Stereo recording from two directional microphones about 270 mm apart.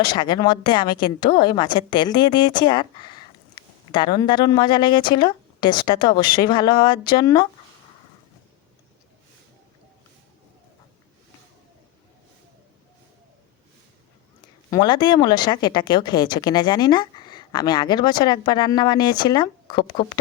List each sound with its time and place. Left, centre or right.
0.0 s a woman's voice: centre
14.7 s a woman's voice: centre